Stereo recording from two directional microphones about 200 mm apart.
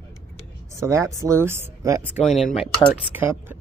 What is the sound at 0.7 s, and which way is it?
Speech, 15° right (ahead or behind).